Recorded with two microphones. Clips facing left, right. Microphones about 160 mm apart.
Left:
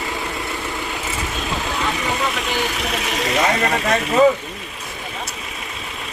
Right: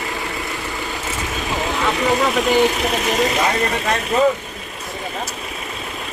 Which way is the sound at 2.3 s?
Centre (ahead or behind).